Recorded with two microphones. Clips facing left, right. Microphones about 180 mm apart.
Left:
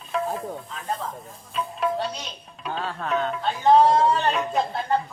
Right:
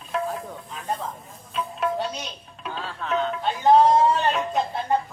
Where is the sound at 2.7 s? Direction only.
45° left (ahead or behind).